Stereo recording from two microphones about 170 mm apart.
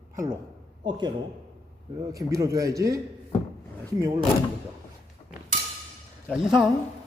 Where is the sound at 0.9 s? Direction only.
25° right (ahead or behind).